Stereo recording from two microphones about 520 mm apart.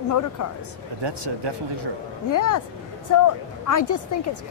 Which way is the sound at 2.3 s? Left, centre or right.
Left.